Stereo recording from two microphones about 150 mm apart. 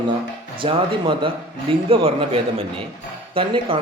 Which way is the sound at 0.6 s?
35° right (ahead or behind).